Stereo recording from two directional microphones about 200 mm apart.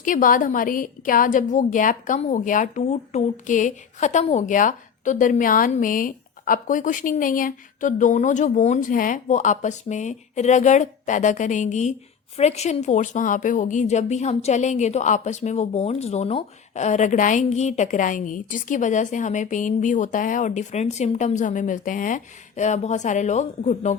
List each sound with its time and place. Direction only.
0.0 s a woman's voice: 40° left (ahead or behind)